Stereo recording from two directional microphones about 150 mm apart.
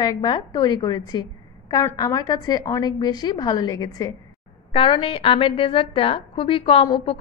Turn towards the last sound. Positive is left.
turn(degrees=35)  # may be behind; listen again after turning